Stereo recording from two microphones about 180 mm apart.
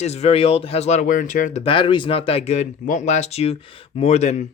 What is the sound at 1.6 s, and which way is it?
Speech, 30° left (ahead or behind).